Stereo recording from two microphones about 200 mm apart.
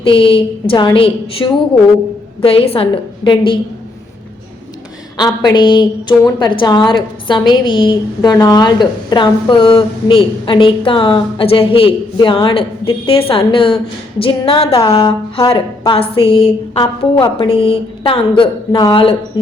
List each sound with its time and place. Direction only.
0.0 s a woman's voice: 25° left (ahead or behind)
5.1 s a woman's voice: 20° left (ahead or behind)